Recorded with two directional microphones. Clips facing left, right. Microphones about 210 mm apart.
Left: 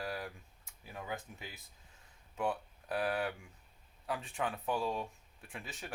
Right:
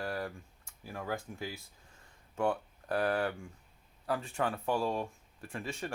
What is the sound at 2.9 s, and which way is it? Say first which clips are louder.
Speech: right 4 dB; 5° left (ahead or behind).